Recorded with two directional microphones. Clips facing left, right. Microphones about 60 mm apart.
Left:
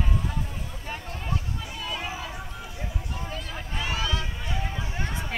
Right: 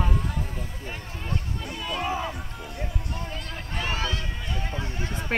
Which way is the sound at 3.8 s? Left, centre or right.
Right.